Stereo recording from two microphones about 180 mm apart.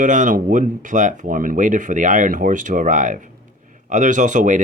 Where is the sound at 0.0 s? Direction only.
45° right (ahead or behind).